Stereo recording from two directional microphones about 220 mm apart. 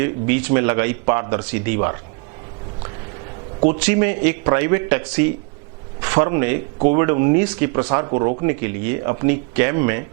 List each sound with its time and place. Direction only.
0.0 s speech: 10° right (ahead or behind)
3.8 s speech: 10° right (ahead or behind)
7.7 s speech: 20° right (ahead or behind)